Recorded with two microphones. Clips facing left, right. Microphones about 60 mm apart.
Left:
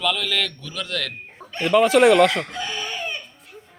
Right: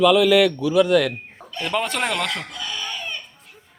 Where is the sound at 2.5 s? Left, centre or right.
Left.